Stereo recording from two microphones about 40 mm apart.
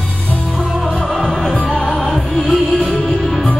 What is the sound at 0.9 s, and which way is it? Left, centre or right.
Music, centre.